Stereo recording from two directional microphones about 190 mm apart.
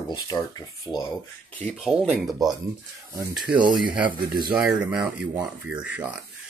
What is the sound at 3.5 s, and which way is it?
Speech, 25° right (ahead or behind).